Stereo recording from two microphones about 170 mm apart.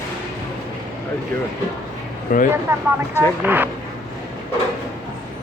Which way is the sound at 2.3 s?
50° left (ahead or behind).